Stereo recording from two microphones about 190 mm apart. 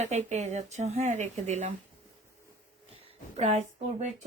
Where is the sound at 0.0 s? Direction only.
40° right (ahead or behind).